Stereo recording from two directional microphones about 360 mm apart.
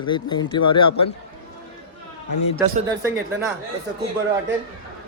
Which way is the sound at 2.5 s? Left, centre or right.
Centre.